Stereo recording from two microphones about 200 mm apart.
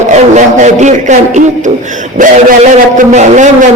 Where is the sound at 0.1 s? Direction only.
35° right (ahead or behind).